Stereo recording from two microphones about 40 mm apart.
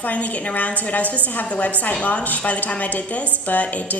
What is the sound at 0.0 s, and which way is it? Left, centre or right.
A woman's voice, left.